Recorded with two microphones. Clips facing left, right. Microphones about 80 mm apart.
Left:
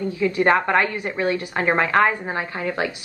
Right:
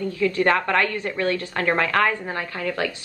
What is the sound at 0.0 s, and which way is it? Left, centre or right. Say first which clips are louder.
A woman's voice: left 1 dB; left.